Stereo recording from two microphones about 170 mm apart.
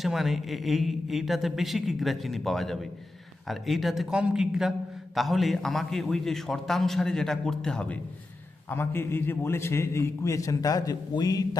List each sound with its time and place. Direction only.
0.0 s a man's voice: centre (ahead or behind); by 11.4 s 20° left (ahead or behind)